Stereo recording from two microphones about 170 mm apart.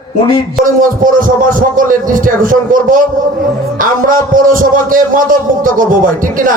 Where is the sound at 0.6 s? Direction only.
55° right (ahead or behind).